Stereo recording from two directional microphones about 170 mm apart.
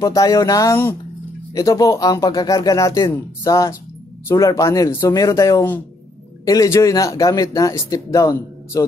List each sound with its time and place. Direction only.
0.0 s speech: 20° left (ahead or behind)